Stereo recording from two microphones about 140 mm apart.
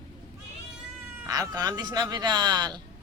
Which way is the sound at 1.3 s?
25° right (ahead or behind).